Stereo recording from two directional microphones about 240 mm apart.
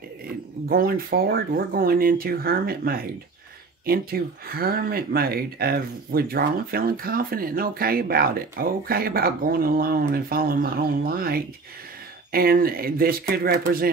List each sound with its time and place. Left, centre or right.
0.7 s speech: right